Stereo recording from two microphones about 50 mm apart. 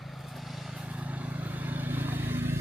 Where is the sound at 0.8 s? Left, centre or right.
Right.